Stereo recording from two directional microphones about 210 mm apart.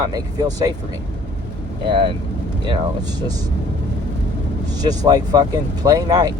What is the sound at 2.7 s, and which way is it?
Speech, 20° right (ahead or behind).